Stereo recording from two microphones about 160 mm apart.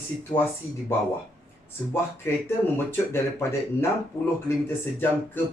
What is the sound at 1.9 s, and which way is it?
Speech, 15° left (ahead or behind).